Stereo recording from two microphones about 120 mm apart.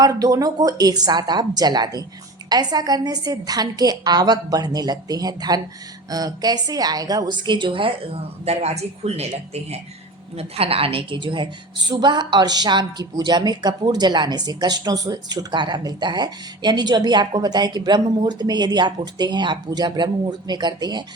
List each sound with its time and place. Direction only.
0.0 s a woman's voice: 30° right (ahead or behind); by 9.3 s 60° right (ahead or behind)
10.3 s a woman's voice: 55° right (ahead or behind); by 21.0 s 40° right (ahead or behind)